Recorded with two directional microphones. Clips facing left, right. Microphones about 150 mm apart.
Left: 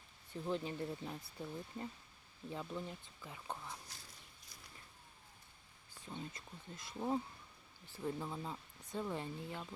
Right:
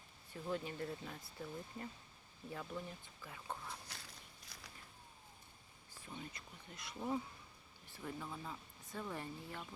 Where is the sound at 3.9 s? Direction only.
70° right (ahead or behind).